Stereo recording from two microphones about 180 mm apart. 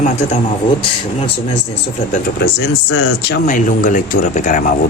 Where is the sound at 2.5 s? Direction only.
65° left (ahead or behind).